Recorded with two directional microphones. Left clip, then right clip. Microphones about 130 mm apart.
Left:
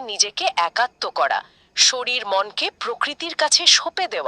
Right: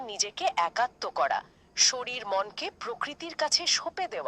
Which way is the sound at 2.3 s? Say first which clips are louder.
Left 6 dB; 40° left (ahead or behind).